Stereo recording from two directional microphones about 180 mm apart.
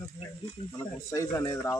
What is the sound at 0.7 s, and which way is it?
Speech, 15° left (ahead or behind).